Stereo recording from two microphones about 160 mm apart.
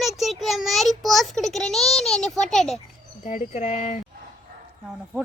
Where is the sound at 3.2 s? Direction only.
50° left (ahead or behind).